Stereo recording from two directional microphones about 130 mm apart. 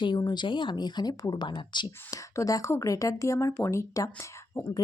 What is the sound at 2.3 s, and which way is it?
Speech, 25° left (ahead or behind).